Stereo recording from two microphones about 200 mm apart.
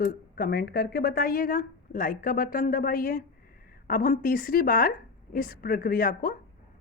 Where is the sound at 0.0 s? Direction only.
50° left (ahead or behind).